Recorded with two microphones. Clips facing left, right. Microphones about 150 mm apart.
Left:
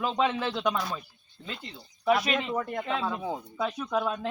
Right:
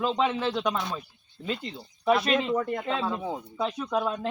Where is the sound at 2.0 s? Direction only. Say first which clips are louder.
Right 2 dB; 5° left (ahead or behind).